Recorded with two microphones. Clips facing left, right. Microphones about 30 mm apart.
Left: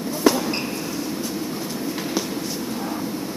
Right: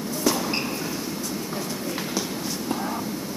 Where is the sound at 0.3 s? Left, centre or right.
Left.